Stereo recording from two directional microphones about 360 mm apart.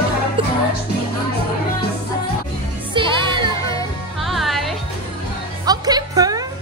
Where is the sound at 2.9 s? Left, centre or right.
Centre.